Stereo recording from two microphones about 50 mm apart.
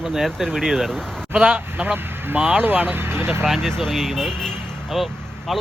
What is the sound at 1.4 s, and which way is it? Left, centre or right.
Speech, right.